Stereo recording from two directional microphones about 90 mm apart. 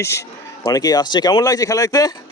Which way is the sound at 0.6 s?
45° left (ahead or behind).